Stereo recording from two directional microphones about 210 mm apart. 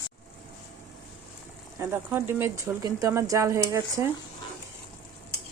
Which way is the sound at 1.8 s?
10° right (ahead or behind).